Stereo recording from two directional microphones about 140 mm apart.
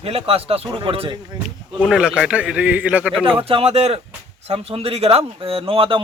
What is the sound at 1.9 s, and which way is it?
A man's voice, 5° right (ahead or behind).